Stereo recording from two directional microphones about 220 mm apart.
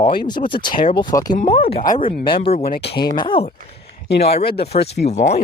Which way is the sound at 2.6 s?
45° left (ahead or behind).